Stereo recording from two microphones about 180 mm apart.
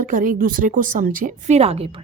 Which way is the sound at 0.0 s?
45° right (ahead or behind).